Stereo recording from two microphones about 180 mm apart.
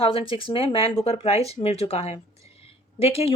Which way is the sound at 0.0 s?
30° left (ahead or behind).